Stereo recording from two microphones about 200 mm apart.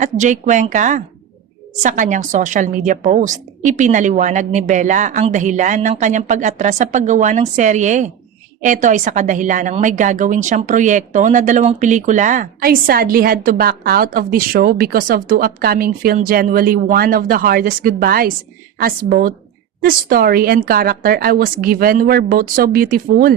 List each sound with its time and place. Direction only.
0.0 s a woman's voice: 40° right (ahead or behind)